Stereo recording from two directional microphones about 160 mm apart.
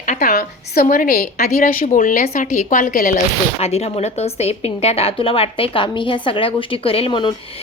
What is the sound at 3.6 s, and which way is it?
A woman's voice, 40° left (ahead or behind).